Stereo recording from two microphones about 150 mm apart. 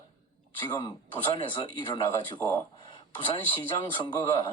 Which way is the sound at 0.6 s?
30° left (ahead or behind).